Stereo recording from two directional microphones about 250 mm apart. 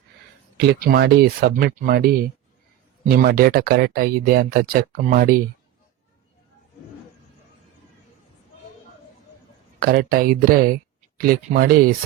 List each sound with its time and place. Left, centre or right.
0.5 s speech: right
9.8 s speech: right